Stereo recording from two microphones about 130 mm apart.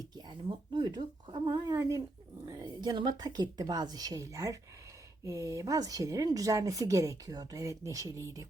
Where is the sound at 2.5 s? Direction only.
30° right (ahead or behind).